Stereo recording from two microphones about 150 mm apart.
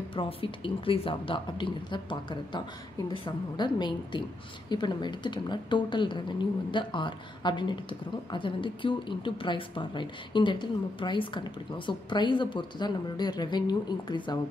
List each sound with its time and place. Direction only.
0.1 s a woman's voice: 35° left (ahead or behind)